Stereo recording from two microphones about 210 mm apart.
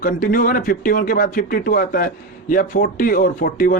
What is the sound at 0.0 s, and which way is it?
A man's voice, 40° left (ahead or behind).